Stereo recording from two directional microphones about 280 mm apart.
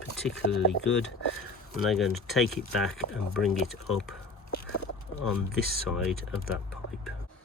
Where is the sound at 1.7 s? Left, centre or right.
Centre.